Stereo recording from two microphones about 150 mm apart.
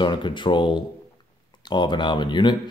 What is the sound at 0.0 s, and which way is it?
Speech, 30° left (ahead or behind).